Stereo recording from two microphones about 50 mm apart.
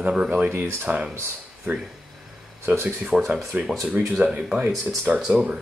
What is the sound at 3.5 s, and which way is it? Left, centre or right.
Speech, right.